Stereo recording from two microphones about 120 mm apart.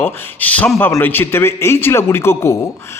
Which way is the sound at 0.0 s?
15° left (ahead or behind).